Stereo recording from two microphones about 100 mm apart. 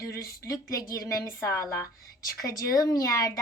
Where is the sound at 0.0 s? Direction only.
30° left (ahead or behind).